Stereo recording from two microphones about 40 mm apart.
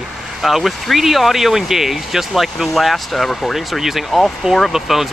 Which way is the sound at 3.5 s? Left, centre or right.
Centre.